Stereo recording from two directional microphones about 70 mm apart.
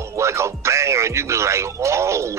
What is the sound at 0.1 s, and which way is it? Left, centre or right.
Speech, right.